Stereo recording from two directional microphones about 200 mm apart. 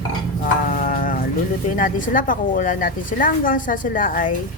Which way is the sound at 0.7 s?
45° left (ahead or behind).